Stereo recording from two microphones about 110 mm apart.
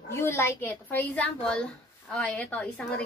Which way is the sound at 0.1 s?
20° left (ahead or behind).